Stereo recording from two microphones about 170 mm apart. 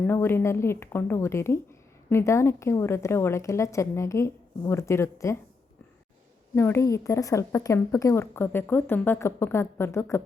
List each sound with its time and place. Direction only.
0.1 s speech: 15° left (ahead or behind)
6.5 s speech: 15° left (ahead or behind)